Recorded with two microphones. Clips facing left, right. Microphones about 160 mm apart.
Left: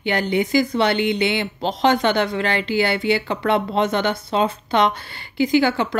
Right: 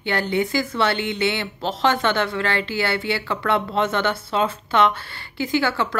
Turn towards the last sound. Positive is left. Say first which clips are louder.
# left 4 dB
turn(degrees=15)  # may be behind; listen again after turning